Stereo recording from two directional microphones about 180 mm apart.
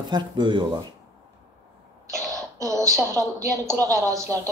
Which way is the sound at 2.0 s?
15° right (ahead or behind).